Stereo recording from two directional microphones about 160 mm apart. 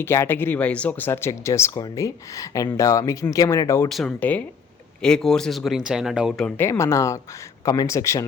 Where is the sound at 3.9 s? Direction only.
5° left (ahead or behind).